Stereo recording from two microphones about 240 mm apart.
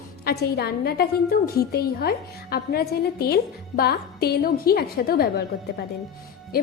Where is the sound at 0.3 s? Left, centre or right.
Left.